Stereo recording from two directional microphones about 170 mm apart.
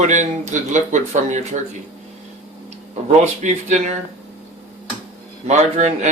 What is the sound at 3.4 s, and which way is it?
Speech, 45° right (ahead or behind).